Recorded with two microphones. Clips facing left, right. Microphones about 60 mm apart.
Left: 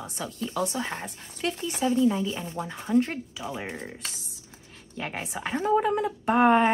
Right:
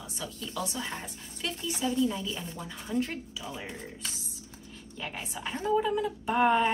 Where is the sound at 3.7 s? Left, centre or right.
Left.